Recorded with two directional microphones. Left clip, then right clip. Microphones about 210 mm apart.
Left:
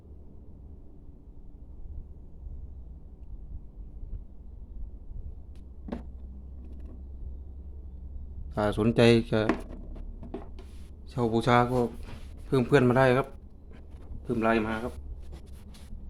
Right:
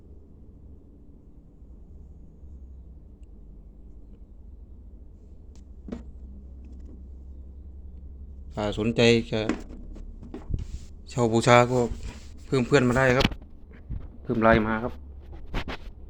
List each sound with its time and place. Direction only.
8.5 s speech: 20° left (ahead or behind)
11.0 s speech: 10° right (ahead or behind)
12.5 s speech: 5° left (ahead or behind)
14.3 s a man's voice: 10° right (ahead or behind)